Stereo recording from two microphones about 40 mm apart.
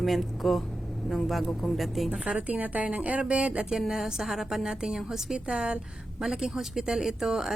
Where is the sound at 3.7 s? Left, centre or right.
Centre.